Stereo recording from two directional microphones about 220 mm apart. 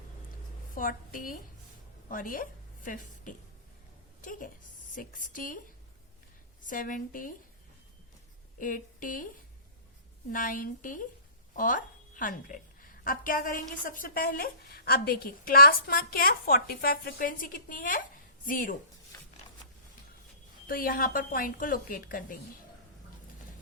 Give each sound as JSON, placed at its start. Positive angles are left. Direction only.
{"t": 0.7, "sound": "a woman's voice", "side_deg": 40}
{"t": 8.5, "sound": "speech", "side_deg": 40}
{"t": 10.3, "sound": "a woman's voice", "side_deg": 40}
{"t": 20.7, "sound": "a woman's voice", "side_deg": 40}